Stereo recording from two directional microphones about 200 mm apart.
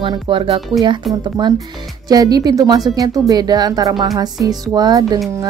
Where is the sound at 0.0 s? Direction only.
25° right (ahead or behind).